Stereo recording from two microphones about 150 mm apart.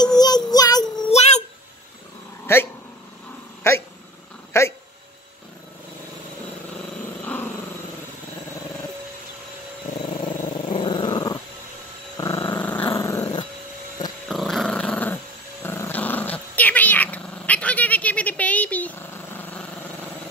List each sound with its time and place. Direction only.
0.0 s child singing: 25° left (ahead or behind)
1.0 s child singing: 45° left (ahead or behind)
2.4 s speech: 15° left (ahead or behind)
4.5 s dog: 15° left (ahead or behind)
10.2 s dog: 30° left (ahead or behind)
14.3 s dog: centre (ahead or behind)
15.6 s growling: 15° left (ahead or behind)